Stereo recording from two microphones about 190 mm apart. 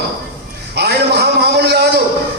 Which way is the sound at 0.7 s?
60° right (ahead or behind).